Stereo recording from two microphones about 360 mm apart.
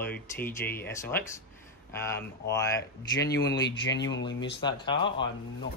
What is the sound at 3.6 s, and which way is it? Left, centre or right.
Speech, left.